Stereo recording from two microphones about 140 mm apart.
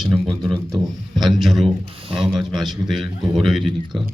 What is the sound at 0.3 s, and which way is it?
Speech, 25° right (ahead or behind).